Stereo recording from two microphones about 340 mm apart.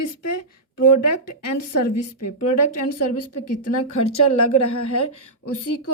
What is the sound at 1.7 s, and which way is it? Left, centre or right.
Speech, left.